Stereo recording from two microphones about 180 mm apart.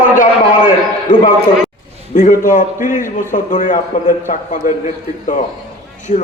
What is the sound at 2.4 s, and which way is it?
A man's voice, 45° left (ahead or behind).